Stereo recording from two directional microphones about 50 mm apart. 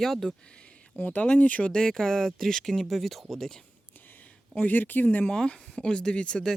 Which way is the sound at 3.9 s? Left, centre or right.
Left.